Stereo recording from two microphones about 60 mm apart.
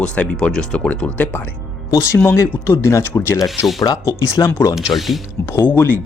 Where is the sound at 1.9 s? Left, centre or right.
Left.